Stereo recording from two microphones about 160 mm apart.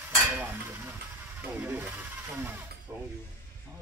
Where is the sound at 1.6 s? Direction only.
10° right (ahead or behind).